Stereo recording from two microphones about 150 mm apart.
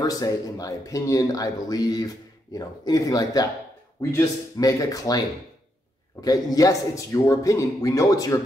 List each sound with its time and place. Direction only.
0.0 s speech: 25° left (ahead or behind)
6.2 s speech: 25° left (ahead or behind)